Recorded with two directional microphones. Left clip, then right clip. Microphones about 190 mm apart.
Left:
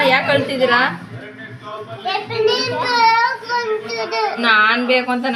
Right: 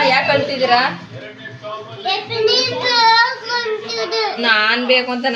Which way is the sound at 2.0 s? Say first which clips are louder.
Right 1 dB; 10° right (ahead or behind).